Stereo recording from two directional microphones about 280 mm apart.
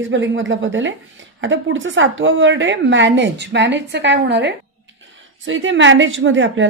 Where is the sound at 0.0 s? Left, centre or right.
Right.